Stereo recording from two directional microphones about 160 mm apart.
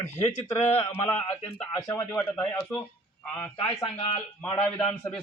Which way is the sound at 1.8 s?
15° left (ahead or behind).